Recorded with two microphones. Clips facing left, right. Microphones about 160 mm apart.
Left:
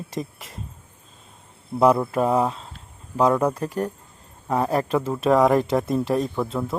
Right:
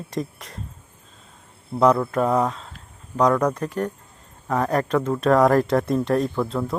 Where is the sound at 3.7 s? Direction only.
10° left (ahead or behind).